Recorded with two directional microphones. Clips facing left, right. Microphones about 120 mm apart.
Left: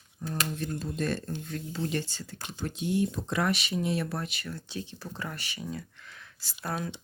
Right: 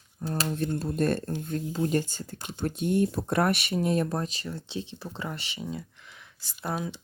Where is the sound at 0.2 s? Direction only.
40° right (ahead or behind); by 5.6 s 20° right (ahead or behind).